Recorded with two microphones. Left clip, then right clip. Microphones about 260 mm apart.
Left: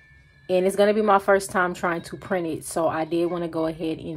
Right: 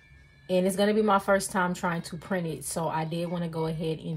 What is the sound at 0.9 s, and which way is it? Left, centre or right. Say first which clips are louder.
A woman's voice: left 5 dB; left.